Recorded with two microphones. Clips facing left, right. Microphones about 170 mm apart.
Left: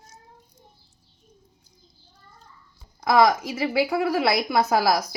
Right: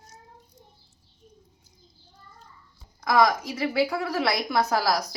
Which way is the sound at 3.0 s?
25° left (ahead or behind).